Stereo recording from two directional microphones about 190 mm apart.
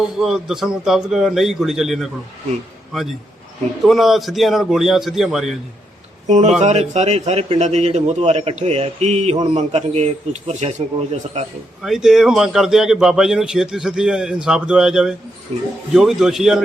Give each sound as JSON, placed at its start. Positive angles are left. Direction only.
{"t": 0.0, "sound": "a man's voice", "side_deg": -5}
{"t": 6.2, "sound": "a man's voice", "side_deg": -35}
{"t": 11.8, "sound": "a man's voice", "side_deg": 0}
{"t": 15.5, "sound": "a man's voice", "side_deg": -35}
{"t": 15.9, "sound": "a man's voice", "side_deg": 0}